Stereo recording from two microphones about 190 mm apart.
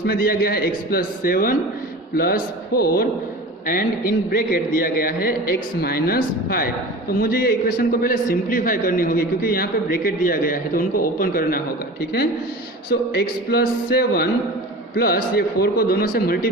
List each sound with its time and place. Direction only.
0.0 s a man's voice: 50° left (ahead or behind)
12.9 s a sound: 55° left (ahead or behind)
14.9 s a man's voice: 55° left (ahead or behind)